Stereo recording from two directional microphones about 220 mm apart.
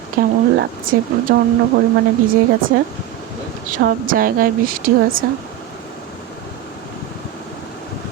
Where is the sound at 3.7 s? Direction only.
40° right (ahead or behind).